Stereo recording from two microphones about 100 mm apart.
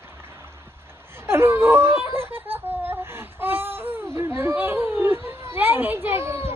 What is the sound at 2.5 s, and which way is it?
Baby cry, 20° right (ahead or behind).